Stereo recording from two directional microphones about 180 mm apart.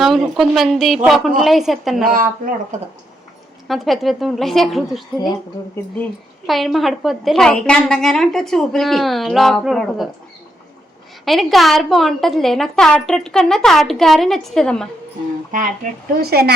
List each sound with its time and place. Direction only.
0.0 s a woman's voice: centre (ahead or behind)
2.0 s speech: 50° right (ahead or behind)
3.7 s a woman's voice: centre (ahead or behind)
6.5 s a woman's voice: centre (ahead or behind)
11.3 s a woman's voice: centre (ahead or behind)
16.2 s a woman's voice: 60° right (ahead or behind)